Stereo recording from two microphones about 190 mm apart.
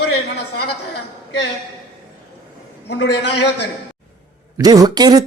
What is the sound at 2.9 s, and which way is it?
Speech, 65° left (ahead or behind).